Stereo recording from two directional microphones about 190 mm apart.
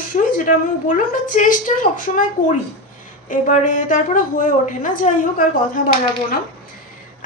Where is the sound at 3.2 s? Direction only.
45° left (ahead or behind).